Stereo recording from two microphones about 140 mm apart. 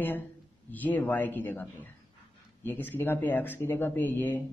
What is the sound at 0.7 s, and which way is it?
A man's voice, 10° left (ahead or behind).